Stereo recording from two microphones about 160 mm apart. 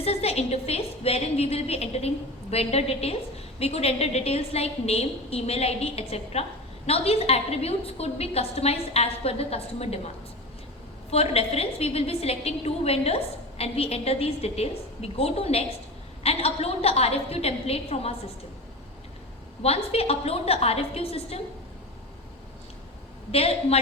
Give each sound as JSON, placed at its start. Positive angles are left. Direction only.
{"t": 0.0, "sound": "a woman's voice", "side_deg": 40}
{"t": 11.1, "sound": "a woman's voice", "side_deg": 40}
{"t": 19.6, "sound": "a woman's voice", "side_deg": 40}
{"t": 23.3, "sound": "a woman's voice", "side_deg": 40}